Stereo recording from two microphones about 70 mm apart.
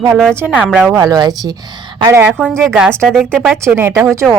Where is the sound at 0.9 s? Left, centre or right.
Right.